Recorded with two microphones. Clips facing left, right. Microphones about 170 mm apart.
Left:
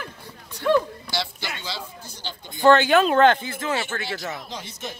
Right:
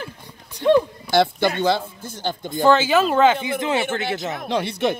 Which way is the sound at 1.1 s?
55° right (ahead or behind).